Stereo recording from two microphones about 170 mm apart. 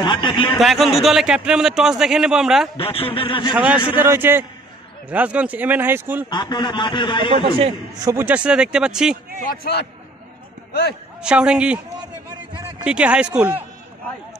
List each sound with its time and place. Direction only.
0.0 s a man's voice: 30° left (ahead or behind)
0.6 s a man's voice: centre (ahead or behind)
2.8 s a man's voice: 35° left (ahead or behind)
3.5 s speech: 5° right (ahead or behind)
6.3 s a man's voice: 25° left (ahead or behind)
8.0 s a man's voice: 15° right (ahead or behind)
9.6 s a man's voice: 70° left (ahead or behind)
11.2 s a man's voice: 5° right (ahead or behind)
12.8 s a man's voice: 5° right (ahead or behind)